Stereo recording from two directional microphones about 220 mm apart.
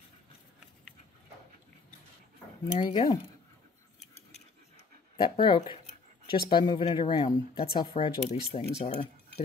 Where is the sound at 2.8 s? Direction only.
25° left (ahead or behind).